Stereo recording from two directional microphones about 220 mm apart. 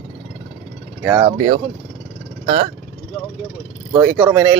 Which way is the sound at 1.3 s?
25° right (ahead or behind).